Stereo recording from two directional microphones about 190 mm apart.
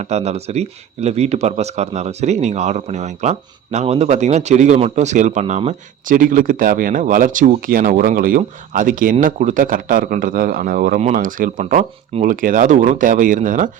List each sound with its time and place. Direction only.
0.0 s a man's voice: 35° right (ahead or behind)